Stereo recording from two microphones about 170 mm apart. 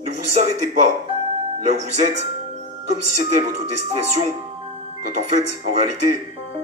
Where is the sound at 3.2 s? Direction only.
45° right (ahead or behind).